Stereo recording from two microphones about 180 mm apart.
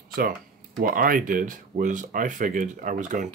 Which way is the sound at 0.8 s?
50° right (ahead or behind).